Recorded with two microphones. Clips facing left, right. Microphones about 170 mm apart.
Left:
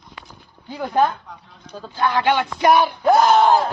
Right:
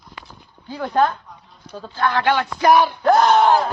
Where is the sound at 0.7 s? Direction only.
15° left (ahead or behind).